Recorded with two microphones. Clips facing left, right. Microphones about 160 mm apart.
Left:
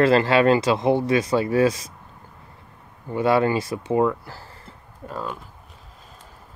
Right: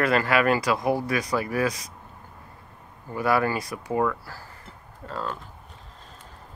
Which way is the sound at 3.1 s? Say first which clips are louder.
Left 4 dB; 25° left (ahead or behind).